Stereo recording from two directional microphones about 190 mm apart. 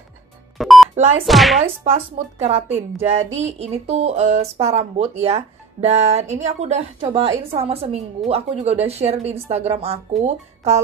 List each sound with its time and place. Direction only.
0.6 s telephone dialing: centre (ahead or behind)
0.9 s speech: 35° right (ahead or behind)
1.2 s speech: centre (ahead or behind)
1.6 s speech: 30° right (ahead or behind)